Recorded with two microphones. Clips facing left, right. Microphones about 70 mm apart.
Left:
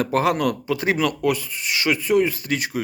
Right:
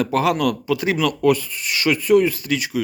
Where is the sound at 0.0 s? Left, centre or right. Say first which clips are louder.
Right 1 dB; left.